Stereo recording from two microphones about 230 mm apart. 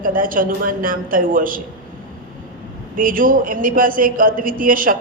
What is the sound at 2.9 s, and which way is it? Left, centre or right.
Speech, right.